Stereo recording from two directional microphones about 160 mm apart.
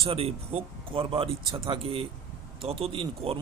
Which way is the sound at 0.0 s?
35° right (ahead or behind).